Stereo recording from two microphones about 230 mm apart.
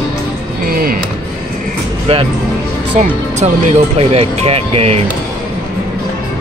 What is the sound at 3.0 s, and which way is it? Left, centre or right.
Speech, right.